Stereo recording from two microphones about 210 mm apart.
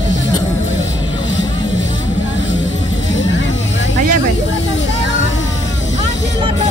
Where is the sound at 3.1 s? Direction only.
60° left (ahead or behind).